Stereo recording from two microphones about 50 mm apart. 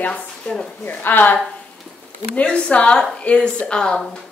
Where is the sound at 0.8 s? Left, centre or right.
Left.